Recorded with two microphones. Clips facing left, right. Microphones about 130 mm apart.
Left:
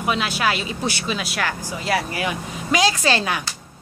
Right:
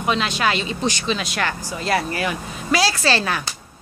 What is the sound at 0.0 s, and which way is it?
Speech, 10° left (ahead or behind).